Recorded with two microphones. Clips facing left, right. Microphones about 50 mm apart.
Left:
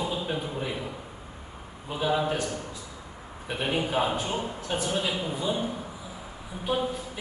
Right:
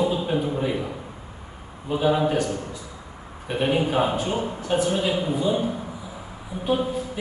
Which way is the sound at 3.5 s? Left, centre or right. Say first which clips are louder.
Right 5 dB; centre.